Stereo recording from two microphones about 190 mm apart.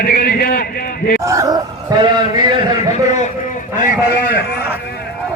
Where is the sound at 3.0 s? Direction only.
35° left (ahead or behind).